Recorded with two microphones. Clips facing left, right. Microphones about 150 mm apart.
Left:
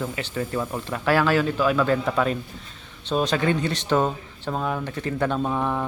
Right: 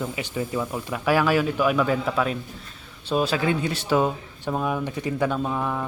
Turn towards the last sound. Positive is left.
turn(degrees=5)  # may be behind; listen again after turning